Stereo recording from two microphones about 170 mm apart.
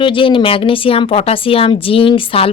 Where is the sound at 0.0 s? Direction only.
30° left (ahead or behind).